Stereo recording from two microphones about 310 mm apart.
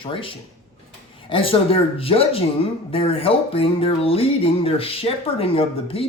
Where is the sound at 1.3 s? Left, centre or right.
Centre.